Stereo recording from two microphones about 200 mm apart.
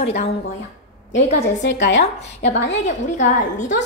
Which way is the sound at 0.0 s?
35° left (ahead or behind).